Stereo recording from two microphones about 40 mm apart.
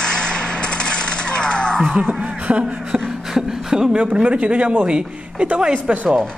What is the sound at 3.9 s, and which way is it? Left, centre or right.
Speech, right.